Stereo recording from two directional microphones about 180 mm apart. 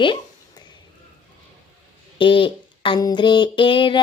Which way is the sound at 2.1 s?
30° left (ahead or behind).